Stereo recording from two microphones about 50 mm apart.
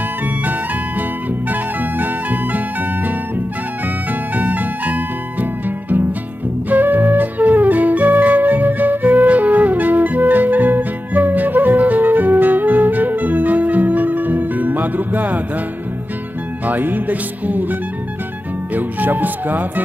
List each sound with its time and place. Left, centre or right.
1.5 s music: right
4.4 s music: right
6.7 s flute: right
16.6 s music: right
18.8 s speech: right